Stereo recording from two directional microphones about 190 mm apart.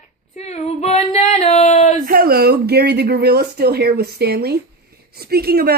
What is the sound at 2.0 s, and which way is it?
Speech, 50° right (ahead or behind).